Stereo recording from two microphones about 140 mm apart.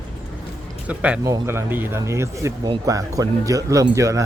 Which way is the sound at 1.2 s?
20° right (ahead or behind).